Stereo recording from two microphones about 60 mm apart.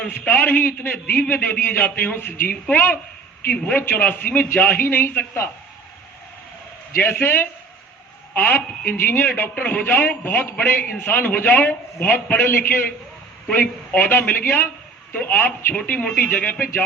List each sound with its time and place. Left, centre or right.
0.1 s a woman's voice: left
6.9 s a woman's voice: left